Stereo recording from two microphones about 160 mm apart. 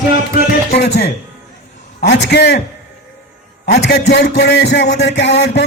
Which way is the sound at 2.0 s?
90° left.